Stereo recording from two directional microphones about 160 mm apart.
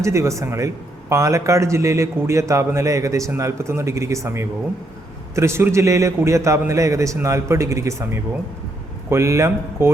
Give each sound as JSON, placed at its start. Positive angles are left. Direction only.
{"t": 0.0, "sound": "a man's voice", "side_deg": -20}